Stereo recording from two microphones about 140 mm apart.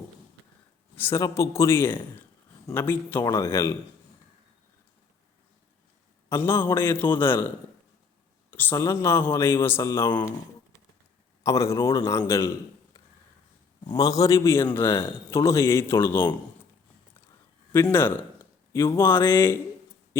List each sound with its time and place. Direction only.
0.9 s a man's voice: 15° left (ahead or behind)
6.2 s a man's voice: 15° left (ahead or behind)
8.4 s a sound: 15° left (ahead or behind)
8.7 s speech: 20° left (ahead or behind)
11.4 s a man's voice: 20° left (ahead or behind)
18.7 s speech: 20° left (ahead or behind)